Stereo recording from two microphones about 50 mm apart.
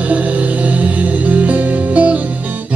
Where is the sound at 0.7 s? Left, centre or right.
Right.